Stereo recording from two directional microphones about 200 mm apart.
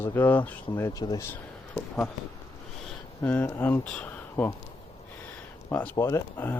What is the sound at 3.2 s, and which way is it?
Speech, 10° left (ahead or behind).